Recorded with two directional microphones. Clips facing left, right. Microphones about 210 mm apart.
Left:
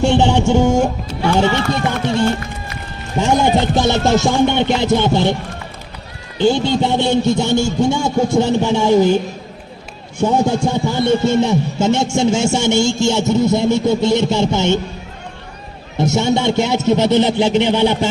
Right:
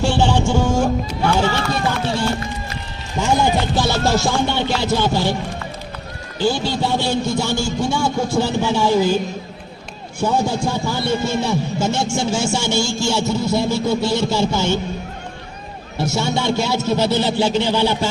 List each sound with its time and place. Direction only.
0.0 s music: 20° left (ahead or behind)
1.4 s speech: 20° left (ahead or behind)
3.2 s music: 20° left (ahead or behind)
6.4 s speech: 20° left (ahead or behind)
10.2 s speech: 20° left (ahead or behind)
16.0 s speech: 20° left (ahead or behind)